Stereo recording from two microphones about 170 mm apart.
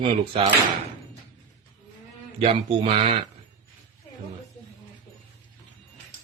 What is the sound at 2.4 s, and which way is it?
Speech, 35° right (ahead or behind).